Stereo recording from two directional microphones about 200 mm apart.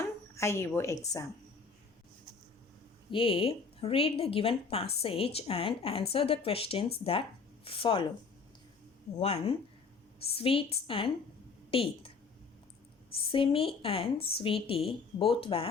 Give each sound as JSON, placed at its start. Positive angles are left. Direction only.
{"t": 0.0, "sound": "speech", "side_deg": 15}
{"t": 3.1, "sound": "speech", "side_deg": 25}
{"t": 9.1, "sound": "speech", "side_deg": 30}
{"t": 13.3, "sound": "speech", "side_deg": 25}